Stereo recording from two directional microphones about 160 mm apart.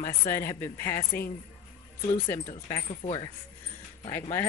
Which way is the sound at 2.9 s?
40° left (ahead or behind).